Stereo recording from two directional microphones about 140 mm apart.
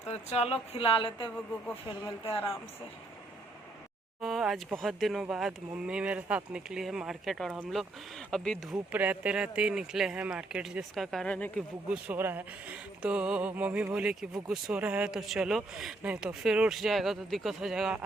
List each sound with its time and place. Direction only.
0.1 s speech: 50° left (ahead or behind)
1.6 s speech: 10° left (ahead or behind)
4.2 s speech: centre (ahead or behind)
8.9 s speech: 10° right (ahead or behind); by 11.6 s 10° left (ahead or behind)
11.9 s speech: 15° right (ahead or behind)